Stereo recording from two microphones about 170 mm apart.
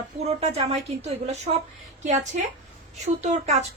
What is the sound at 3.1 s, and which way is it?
Speech, 40° right (ahead or behind).